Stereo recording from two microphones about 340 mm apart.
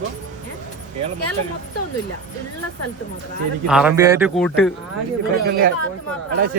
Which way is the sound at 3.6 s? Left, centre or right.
Centre.